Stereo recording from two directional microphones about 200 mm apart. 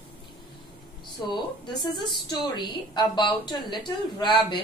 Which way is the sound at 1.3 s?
20° left (ahead or behind).